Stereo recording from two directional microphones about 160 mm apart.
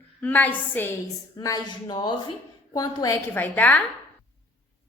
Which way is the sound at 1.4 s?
25° left (ahead or behind).